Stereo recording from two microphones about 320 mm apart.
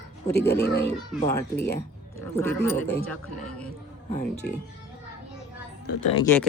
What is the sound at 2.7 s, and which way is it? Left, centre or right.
Speech, left.